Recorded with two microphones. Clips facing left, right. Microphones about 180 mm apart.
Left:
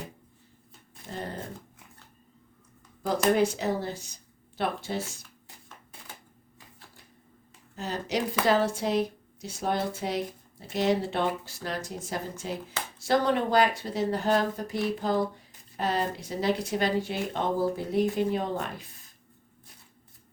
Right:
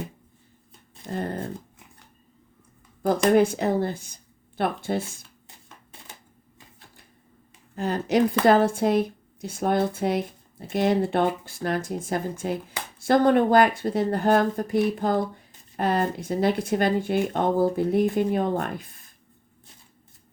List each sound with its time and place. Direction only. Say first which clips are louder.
1.1 s speech: right 7 dB; 55° right (ahead or behind)
3.3 s speech: right 6 dB; 55° right (ahead or behind)
7.8 s speech: right 8 dB; 55° right (ahead or behind)